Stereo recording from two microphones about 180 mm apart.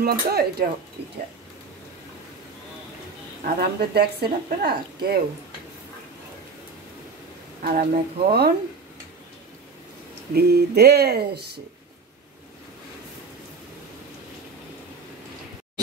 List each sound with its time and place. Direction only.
0.0 s speech: 60° right (ahead or behind)
3.4 s speech: 65° right (ahead or behind)
7.6 s speech: 55° right (ahead or behind)
10.3 s speech: 65° right (ahead or behind)